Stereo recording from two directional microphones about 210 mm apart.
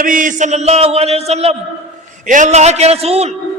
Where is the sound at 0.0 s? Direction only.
40° right (ahead or behind).